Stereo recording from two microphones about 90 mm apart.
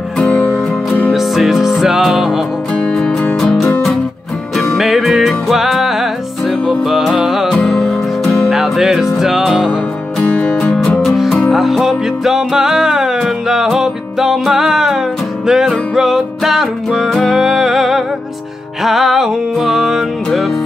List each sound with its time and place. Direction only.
0.2 s music: 15° left (ahead or behind)
1.1 s music: centre (ahead or behind)
2.7 s music: 5° left (ahead or behind)
10.3 s music: 10° left (ahead or behind)